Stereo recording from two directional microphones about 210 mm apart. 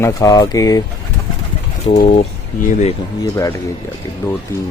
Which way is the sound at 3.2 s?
15° left (ahead or behind).